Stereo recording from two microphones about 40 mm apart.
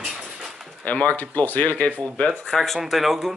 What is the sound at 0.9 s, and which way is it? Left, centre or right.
Speech, left.